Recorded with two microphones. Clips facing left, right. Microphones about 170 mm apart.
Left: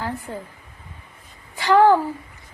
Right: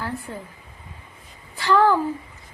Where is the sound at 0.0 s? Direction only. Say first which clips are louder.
Left 2 dB; 20° left (ahead or behind).